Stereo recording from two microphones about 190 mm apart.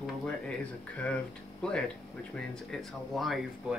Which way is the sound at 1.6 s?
5° left (ahead or behind).